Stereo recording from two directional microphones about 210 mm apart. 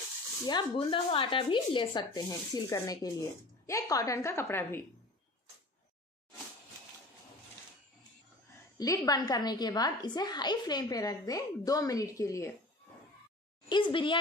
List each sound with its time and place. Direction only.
0.5 s a woman's voice: 20° left (ahead or behind)
8.7 s a woman's voice: 15° left (ahead or behind)
13.7 s speech: 25° left (ahead or behind)